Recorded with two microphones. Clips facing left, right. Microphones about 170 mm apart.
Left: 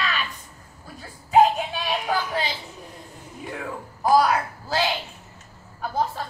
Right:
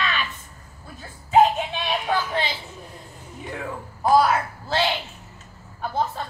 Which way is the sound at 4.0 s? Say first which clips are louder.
Right 1 dB; centre (ahead or behind).